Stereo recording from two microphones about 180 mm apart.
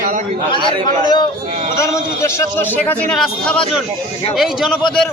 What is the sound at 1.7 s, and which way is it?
A man's voice, 15° left (ahead or behind).